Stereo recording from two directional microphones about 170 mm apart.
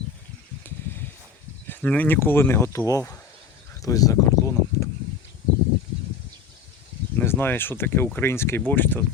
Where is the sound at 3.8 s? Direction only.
20° left (ahead or behind).